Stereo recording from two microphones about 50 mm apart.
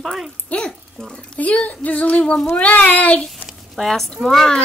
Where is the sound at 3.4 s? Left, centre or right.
Left.